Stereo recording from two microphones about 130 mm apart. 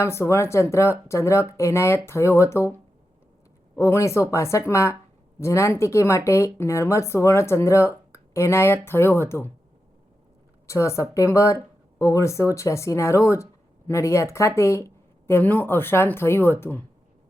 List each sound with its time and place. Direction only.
0.0 s speech: 20° left (ahead or behind)
3.8 s speech: 20° left (ahead or behind)
10.7 s speech: 20° left (ahead or behind)